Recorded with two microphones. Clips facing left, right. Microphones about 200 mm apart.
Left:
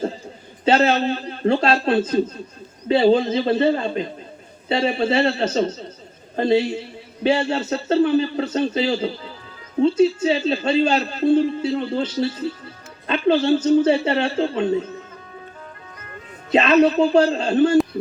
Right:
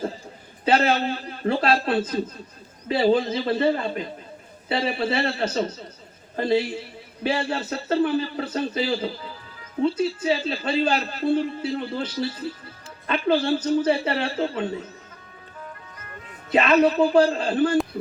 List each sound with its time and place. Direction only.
0.6 s a man's voice: 25° left (ahead or behind)
9.8 s a man's voice: 25° left (ahead or behind)
16.5 s a man's voice: 25° left (ahead or behind)